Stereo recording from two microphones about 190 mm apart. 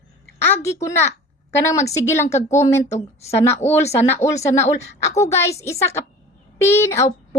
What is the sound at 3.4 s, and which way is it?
A woman's voice, 10° left (ahead or behind).